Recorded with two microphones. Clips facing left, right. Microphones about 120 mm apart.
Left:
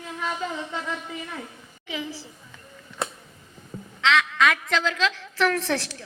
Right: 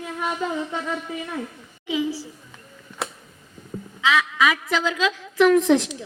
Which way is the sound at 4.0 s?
10° right (ahead or behind).